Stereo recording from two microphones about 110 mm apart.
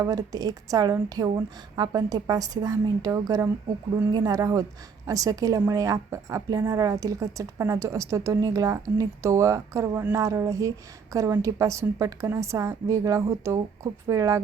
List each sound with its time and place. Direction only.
0.0 s a woman's voice: 30° right (ahead or behind)